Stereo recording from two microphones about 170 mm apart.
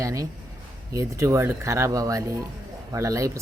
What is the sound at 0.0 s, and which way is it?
Speech, 20° right (ahead or behind).